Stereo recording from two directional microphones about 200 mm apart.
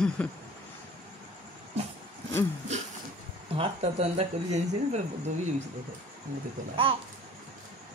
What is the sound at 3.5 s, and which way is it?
Speech, 30° right (ahead or behind).